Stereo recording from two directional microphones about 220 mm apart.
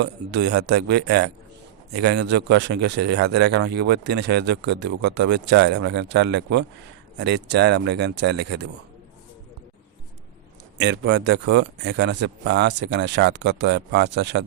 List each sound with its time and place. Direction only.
0.0 s speech: 50° right (ahead or behind)
10.8 s speech: 55° right (ahead or behind)